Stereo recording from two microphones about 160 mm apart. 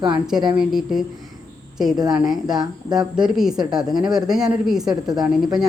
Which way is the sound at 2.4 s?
25° right (ahead or behind).